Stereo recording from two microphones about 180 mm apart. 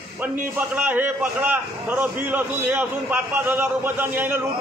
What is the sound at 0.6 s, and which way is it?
A man's voice, 10° right (ahead or behind).